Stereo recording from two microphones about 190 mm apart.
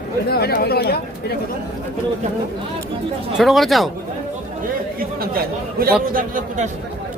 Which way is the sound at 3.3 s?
Centre (ahead or behind).